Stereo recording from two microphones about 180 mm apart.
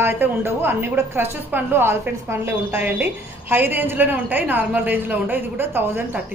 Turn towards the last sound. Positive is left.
turn(degrees=-10)  # may be behind; listen again after turning